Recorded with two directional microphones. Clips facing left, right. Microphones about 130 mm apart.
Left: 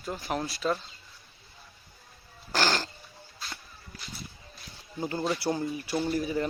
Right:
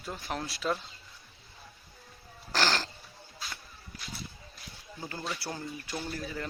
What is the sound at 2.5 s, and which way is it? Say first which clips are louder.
Dog: left 2 dB; 5° left (ahead or behind).